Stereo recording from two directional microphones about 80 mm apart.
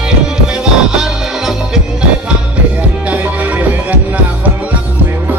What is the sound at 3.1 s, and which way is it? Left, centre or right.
Music, centre.